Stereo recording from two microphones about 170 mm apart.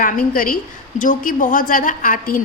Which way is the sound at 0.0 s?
55° left (ahead or behind).